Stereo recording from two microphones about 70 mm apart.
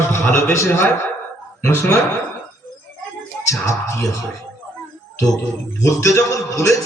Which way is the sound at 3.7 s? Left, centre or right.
Left.